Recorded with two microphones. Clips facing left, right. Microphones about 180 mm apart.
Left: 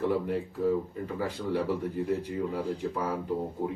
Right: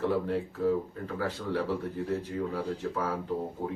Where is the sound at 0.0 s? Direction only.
15° left (ahead or behind).